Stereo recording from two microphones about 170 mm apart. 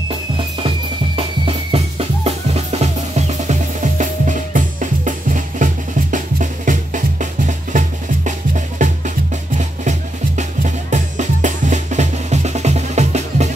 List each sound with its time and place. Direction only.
0.4 s drum: 30° right (ahead or behind); by 5.7 s 50° right (ahead or behind)
6.1 s music: 50° right (ahead or behind)